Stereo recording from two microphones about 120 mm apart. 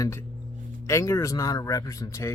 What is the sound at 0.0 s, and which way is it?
Speech, 20° left (ahead or behind).